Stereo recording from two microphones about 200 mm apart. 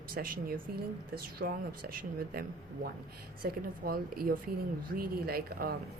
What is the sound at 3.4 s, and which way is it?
Speech, 50° right (ahead or behind).